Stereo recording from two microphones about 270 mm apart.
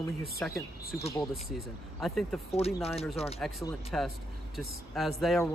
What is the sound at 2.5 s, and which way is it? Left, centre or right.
Speech, left.